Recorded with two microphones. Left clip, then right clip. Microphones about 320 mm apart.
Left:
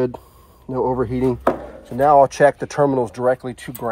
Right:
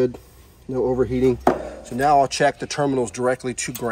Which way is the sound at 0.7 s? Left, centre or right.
Centre.